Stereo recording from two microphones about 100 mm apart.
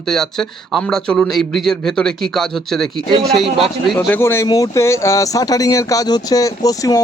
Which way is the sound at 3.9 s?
20° left (ahead or behind).